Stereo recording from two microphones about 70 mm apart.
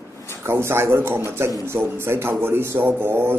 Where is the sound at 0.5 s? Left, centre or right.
Right.